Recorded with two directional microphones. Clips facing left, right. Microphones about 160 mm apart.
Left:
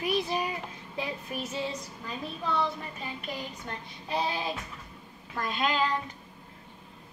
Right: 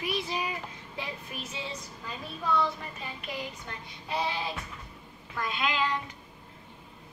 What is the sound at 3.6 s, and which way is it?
Child singing, 40° left (ahead or behind).